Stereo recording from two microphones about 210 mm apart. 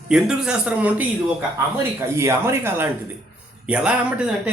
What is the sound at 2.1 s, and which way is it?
Speech, 15° right (ahead or behind).